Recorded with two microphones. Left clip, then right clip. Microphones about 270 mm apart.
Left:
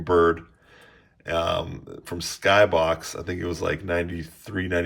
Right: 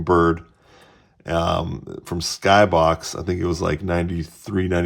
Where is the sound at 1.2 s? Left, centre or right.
Centre.